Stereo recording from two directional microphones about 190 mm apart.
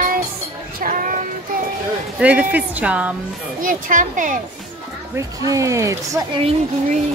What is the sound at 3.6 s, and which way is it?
Speech, 45° right (ahead or behind).